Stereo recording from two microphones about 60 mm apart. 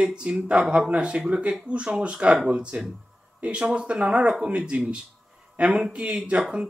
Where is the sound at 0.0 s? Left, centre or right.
Centre.